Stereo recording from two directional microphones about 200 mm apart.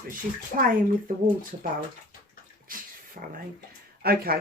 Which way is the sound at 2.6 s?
45° right (ahead or behind).